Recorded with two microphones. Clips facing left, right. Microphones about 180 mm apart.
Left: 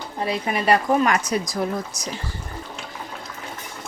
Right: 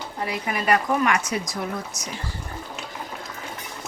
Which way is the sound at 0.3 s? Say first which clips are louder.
Left 3 dB; 30° left (ahead or behind).